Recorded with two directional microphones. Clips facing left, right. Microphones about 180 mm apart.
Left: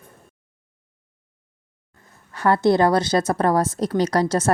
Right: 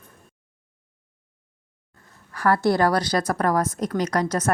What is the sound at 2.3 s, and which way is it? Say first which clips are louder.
A woman's voice: left 3 dB; 25° left (ahead or behind).